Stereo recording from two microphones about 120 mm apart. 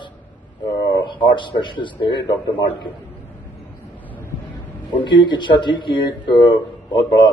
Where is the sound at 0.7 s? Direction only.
40° left (ahead or behind).